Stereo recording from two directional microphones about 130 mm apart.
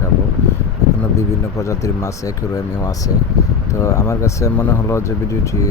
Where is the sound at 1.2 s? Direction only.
25° left (ahead or behind).